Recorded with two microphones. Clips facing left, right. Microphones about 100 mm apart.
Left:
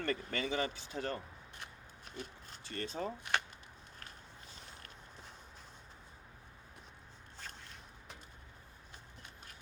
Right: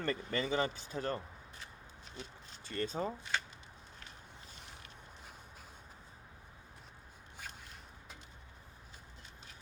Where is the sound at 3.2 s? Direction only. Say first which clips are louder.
Left 2 dB; 60° left (ahead or behind).